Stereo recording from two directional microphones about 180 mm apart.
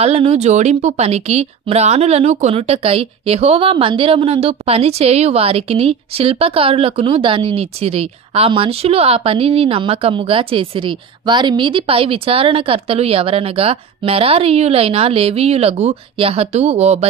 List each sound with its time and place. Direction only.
0.0 s speech: 35° right (ahead or behind)